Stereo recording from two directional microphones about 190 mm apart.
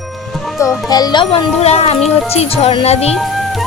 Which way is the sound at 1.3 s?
35° left (ahead or behind).